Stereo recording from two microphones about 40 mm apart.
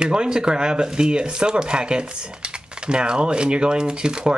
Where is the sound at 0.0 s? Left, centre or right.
Right.